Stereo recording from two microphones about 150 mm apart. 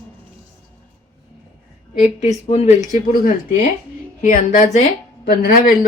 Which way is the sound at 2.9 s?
65° left (ahead or behind).